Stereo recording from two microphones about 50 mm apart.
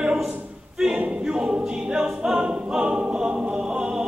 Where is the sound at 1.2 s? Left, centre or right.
Centre.